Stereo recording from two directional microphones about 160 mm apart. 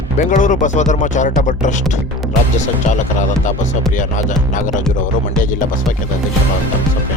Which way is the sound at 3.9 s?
55° left (ahead or behind).